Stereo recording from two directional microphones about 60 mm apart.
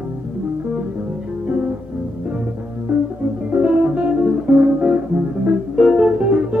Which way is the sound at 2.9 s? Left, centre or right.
Right.